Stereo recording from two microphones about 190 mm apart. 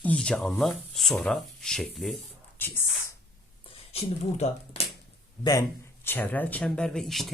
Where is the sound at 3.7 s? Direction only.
30° left (ahead or behind).